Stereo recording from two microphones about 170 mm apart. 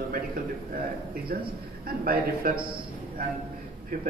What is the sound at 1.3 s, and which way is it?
A man's voice, 60° right (ahead or behind).